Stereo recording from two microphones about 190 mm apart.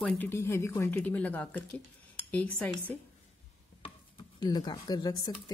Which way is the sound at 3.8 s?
25° left (ahead or behind).